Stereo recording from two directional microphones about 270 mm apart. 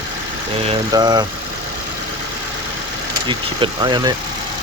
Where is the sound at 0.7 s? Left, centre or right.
Centre.